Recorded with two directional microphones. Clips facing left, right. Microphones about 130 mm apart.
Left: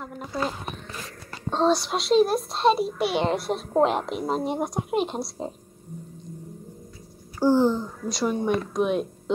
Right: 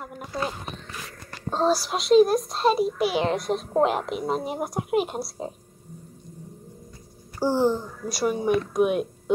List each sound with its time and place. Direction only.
0.3 s a child's voice: centre (ahead or behind)
7.4 s a sound: 15° right (ahead or behind)
8.1 s a child's voice: 5° right (ahead or behind)